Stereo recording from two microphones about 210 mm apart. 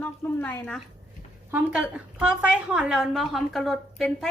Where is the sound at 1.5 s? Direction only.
5° right (ahead or behind).